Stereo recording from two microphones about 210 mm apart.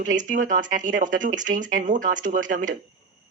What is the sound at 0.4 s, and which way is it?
Speech, 35° right (ahead or behind).